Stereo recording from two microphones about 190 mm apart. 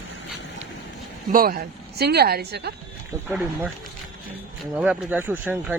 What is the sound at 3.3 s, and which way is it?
Speech, 10° right (ahead or behind).